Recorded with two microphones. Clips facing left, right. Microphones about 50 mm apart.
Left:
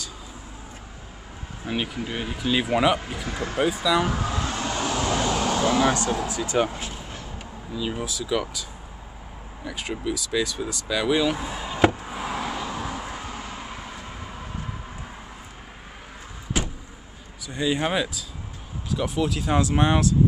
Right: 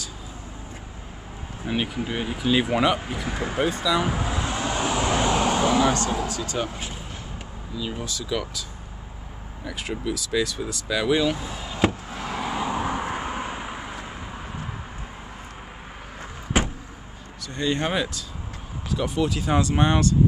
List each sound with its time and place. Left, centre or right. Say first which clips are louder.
1.7 s speech: right 2 dB; centre
4.0 s vehicle: even; centre
6.2 s speech: left 4 dB; centre
7.7 s speech: left 2 dB; centre
9.7 s speech: even; centre
11.3 s a sound: left 2 dB; centre
12.4 s vehicle: right 5 dB; centre
12.6 s vehicle: right 5 dB; right
16.5 s vehicle: right 5 dB; right
17.5 s speech: left 1 dB; centre